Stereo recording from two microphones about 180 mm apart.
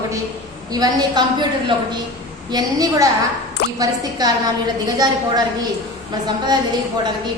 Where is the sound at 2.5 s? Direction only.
20° right (ahead or behind).